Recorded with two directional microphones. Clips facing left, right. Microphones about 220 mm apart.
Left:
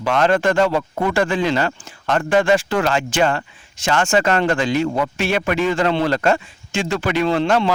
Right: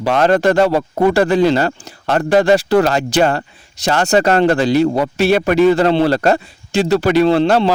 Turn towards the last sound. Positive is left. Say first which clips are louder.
# right 5 dB
turn(degrees=-35)  # may be behind; listen again after turning